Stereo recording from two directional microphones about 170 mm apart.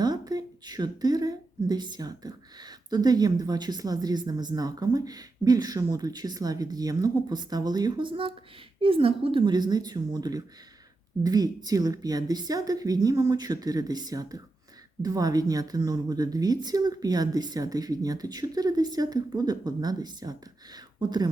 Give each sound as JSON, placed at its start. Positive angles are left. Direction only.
{"t": 0.0, "sound": "speech", "side_deg": -25}